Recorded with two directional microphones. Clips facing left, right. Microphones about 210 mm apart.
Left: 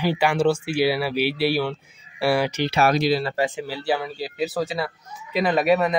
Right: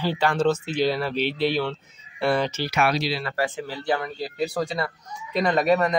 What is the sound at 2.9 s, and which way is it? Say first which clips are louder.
Speech: left 5 dB; 45° left (ahead or behind).